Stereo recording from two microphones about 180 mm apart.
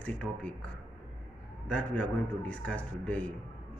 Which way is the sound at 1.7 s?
10° left (ahead or behind).